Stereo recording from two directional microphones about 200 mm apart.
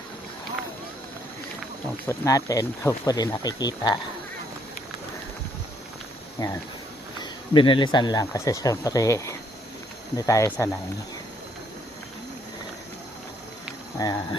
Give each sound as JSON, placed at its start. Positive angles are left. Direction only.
{"t": 2.0, "sound": "speech", "side_deg": 15}
{"t": 6.4, "sound": "speech", "side_deg": 20}
{"t": 14.0, "sound": "speech", "side_deg": 20}